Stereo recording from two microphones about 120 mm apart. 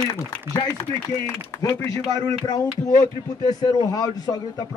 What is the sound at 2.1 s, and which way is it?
A man's voice, 30° left (ahead or behind).